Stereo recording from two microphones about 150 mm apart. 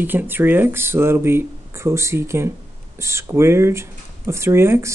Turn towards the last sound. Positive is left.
turn(degrees=-15)  # may be behind; listen again after turning